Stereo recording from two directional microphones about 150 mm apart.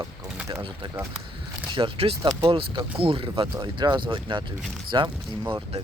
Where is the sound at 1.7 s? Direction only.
35° right (ahead or behind).